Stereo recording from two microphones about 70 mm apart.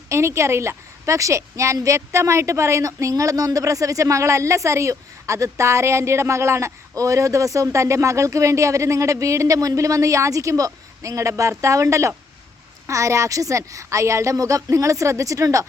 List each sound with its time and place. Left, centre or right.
0.1 s a woman's voice: right